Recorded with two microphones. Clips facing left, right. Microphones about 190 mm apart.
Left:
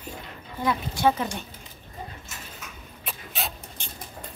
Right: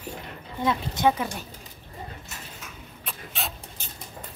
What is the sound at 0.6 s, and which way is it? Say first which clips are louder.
Speech: even; 20° right (ahead or behind).